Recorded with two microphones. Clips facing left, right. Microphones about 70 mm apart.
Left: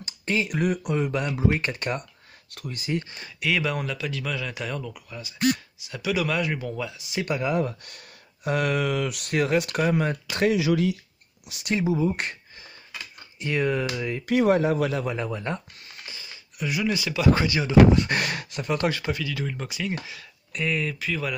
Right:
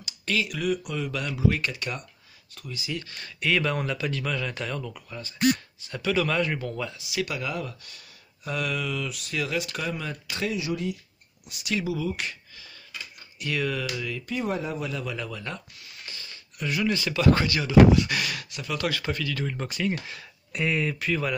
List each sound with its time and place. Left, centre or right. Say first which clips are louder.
0.0 s speech: left 2 dB; left
2.5 s speech: left 5 dB; left
3.0 s speech: left 3 dB; centre
3.3 s speech: even; centre
7.1 s speech: left 5 dB; left
8.5 s speech: left 5 dB; left
10.5 s speech: left 6 dB; left
11.7 s speech: left 4 dB; left
13.4 s speech: left 4 dB; left
14.2 s speech: left 11 dB; left
15.1 s speech: left 5 dB; left
16.1 s speech: left 1 dB; centre
17.9 s speech: left 1 dB; left
18.9 s speech: left 1 dB; centre